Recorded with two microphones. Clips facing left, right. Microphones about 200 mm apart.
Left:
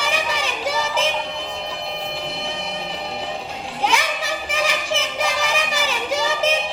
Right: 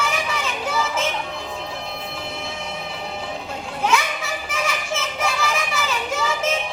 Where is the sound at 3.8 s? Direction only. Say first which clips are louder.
Even; 35° left (ahead or behind).